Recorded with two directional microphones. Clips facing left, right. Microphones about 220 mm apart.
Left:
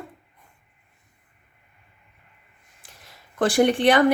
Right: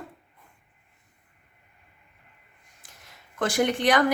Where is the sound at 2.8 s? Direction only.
35° left (ahead or behind).